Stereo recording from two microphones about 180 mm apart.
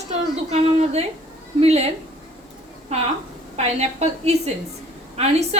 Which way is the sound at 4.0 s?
35° right (ahead or behind).